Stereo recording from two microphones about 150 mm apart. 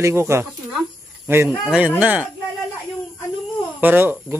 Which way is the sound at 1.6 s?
5° right (ahead or behind).